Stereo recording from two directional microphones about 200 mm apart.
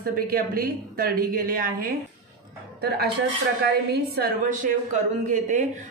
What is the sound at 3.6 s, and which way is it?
Speech, 50° right (ahead or behind).